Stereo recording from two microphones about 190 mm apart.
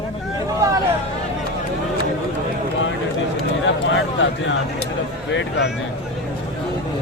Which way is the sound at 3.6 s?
80° left.